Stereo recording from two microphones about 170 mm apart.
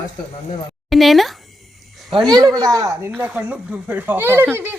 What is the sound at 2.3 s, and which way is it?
Speech, 20° right (ahead or behind).